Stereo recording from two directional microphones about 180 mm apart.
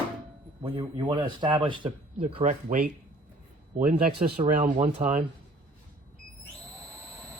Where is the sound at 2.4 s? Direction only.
45° right (ahead or behind).